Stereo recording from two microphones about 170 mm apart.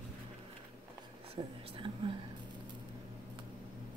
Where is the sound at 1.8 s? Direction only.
30° right (ahead or behind).